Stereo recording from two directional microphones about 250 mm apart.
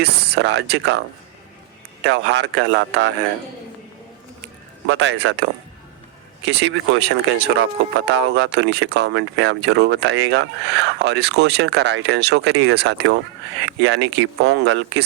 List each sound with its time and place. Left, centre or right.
0.0 s speech: right
2.0 s speech: right
4.9 s speech: right
6.5 s speech: right